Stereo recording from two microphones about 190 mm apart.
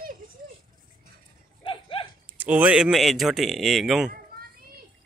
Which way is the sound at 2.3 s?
10° right (ahead or behind).